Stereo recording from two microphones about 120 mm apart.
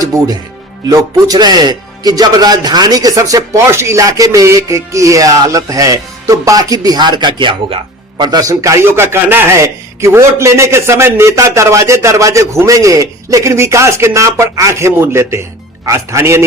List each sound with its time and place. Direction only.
0.0 s a man's voice: 30° right (ahead or behind)